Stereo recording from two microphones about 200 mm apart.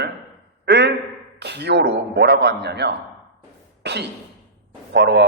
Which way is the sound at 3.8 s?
55° right (ahead or behind).